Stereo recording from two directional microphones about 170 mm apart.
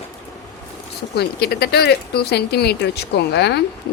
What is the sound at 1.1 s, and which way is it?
A woman's voice, 70° left (ahead or behind).